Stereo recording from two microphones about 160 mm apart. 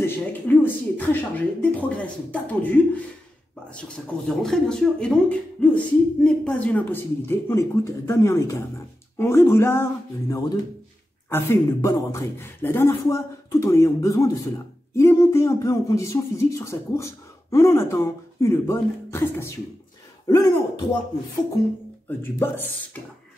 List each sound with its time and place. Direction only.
0.0 s speech: 10° left (ahead or behind)
11.2 s speech: 15° left (ahead or behind)